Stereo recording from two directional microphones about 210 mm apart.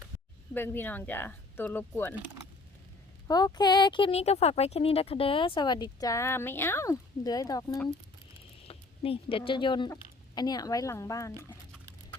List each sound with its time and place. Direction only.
0.5 s speech: 10° left (ahead or behind)
3.2 s a woman's voice: 20° left (ahead or behind)